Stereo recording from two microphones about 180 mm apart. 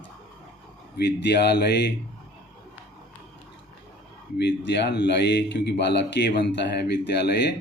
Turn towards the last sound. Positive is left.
turn(degrees=70)  # may be behind; listen again after turning